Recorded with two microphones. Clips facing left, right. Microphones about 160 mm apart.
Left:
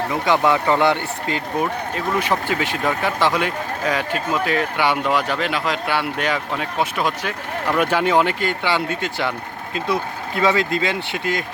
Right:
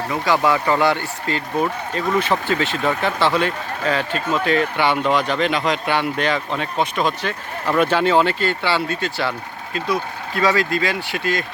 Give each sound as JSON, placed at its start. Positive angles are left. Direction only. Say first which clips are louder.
{"t": 0.3, "sound": "speech", "louder": "even", "side_deg": 20}
{"t": 2.0, "sound": "speech", "louder": "right 2 dB", "side_deg": 10}